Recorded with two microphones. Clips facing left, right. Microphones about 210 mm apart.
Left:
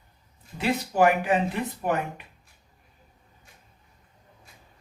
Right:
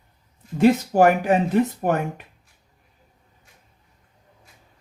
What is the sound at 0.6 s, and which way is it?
Speech, 45° right (ahead or behind).